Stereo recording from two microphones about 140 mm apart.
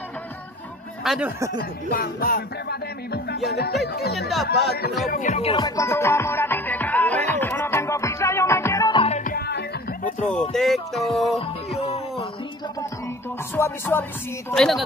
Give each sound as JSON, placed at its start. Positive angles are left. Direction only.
{"t": 1.0, "sound": "speech", "side_deg": 0}
{"t": 1.6, "sound": "music", "side_deg": 90}
{"t": 4.1, "sound": "a sound", "side_deg": 0}
{"t": 5.1, "sound": "music", "side_deg": 65}
{"t": 5.4, "sound": "music", "side_deg": 40}
{"t": 5.8, "sound": "music", "side_deg": 20}
{"t": 8.9, "sound": "music", "side_deg": 45}
{"t": 10.5, "sound": "a sound", "side_deg": 0}
{"t": 13.6, "sound": "music", "side_deg": 15}
{"t": 14.5, "sound": "a sound", "side_deg": 0}